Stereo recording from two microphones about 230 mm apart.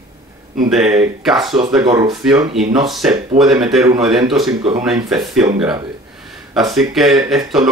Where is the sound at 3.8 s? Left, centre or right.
Centre.